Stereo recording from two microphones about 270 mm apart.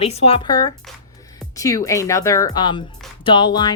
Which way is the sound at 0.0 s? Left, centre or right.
Left.